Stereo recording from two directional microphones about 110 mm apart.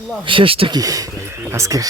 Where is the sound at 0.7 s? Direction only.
35° right (ahead or behind).